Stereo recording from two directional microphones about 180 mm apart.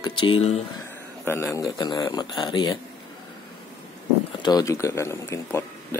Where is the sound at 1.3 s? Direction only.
15° left (ahead or behind).